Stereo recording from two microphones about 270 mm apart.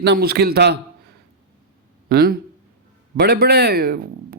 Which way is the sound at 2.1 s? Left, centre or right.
Right.